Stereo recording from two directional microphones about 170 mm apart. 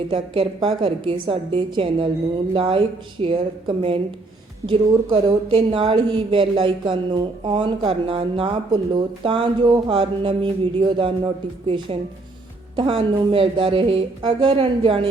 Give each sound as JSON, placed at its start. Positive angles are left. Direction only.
{"t": 0.1, "sound": "a woman's voice", "side_deg": -30}
{"t": 12.7, "sound": "speech", "side_deg": -30}